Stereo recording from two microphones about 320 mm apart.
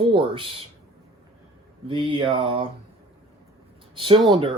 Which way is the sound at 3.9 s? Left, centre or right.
Centre.